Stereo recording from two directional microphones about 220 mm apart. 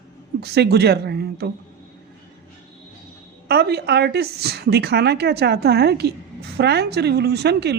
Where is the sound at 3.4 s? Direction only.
45° right (ahead or behind).